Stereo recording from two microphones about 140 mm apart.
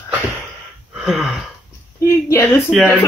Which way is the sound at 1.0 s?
5° right (ahead or behind).